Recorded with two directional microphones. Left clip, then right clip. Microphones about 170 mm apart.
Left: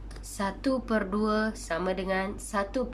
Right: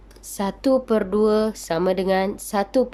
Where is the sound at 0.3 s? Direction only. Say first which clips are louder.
Right 9 dB; 25° right (ahead or behind).